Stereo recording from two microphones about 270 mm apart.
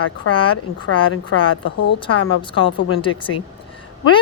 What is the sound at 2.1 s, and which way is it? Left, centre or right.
Speech, left.